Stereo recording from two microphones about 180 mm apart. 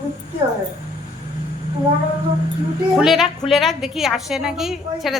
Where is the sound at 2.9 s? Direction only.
Centre (ahead or behind).